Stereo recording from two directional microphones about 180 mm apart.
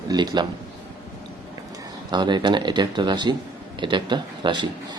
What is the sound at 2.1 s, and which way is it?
A man's voice, 25° right (ahead or behind).